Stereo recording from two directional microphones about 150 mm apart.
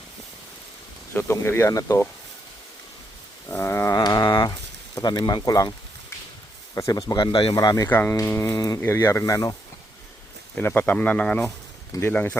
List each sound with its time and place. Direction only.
1.1 s speech: 15° left (ahead or behind)
3.5 s wild animals: 15° left (ahead or behind)
3.9 s dog: 25° left (ahead or behind)
4.9 s speech: 25° left (ahead or behind)
6.7 s speech: 25° left (ahead or behind)
7.9 s speech: 10° left (ahead or behind)
11.4 s speech: 20° left (ahead or behind)